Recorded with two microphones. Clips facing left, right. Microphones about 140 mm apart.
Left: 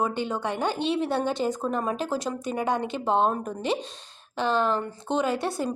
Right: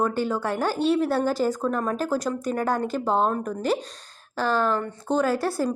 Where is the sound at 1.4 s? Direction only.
25° left (ahead or behind).